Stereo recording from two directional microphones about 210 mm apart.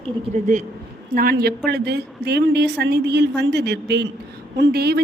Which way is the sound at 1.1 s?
50° right (ahead or behind).